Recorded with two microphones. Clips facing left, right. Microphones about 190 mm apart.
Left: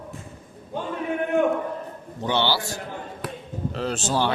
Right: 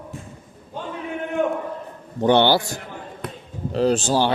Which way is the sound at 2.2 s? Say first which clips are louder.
Right 8 dB; 55° right (ahead or behind).